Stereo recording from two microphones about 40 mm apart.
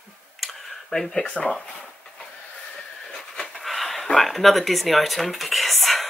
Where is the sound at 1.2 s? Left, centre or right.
Centre.